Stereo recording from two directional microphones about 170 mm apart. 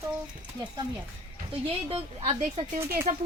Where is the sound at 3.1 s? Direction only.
55° right (ahead or behind).